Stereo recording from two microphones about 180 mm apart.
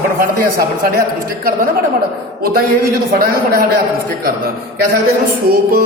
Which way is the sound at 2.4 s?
55° right (ahead or behind).